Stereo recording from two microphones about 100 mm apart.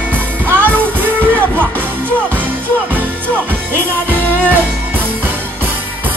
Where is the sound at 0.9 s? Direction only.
20° right (ahead or behind).